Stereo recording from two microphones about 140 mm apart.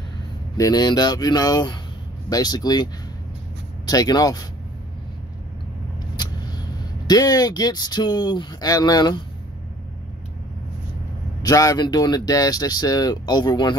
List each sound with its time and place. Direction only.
0.6 s speech: 30° left (ahead or behind)
7.1 s speech: 25° left (ahead or behind)
11.4 s speech: 25° left (ahead or behind)